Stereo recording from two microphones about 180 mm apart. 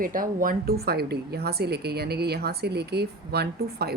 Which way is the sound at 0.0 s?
50° right (ahead or behind).